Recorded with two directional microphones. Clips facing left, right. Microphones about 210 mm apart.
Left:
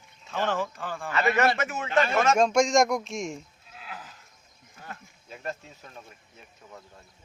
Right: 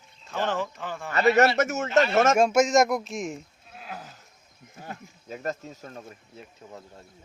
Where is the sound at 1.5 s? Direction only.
45° right (ahead or behind).